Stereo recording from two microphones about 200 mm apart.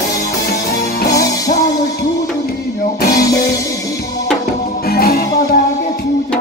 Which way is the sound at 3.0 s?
50° left (ahead or behind).